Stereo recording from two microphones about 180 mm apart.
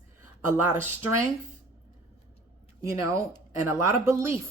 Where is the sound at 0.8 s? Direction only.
45° right (ahead or behind).